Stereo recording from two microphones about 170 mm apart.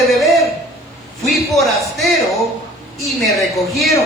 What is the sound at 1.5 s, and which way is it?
Speech, centre (ahead or behind).